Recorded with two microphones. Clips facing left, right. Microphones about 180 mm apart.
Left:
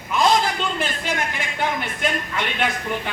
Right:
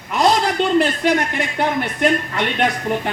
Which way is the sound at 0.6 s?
70° right (ahead or behind).